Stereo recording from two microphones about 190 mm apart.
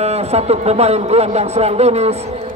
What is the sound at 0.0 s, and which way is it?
A man's voice, 35° right (ahead or behind).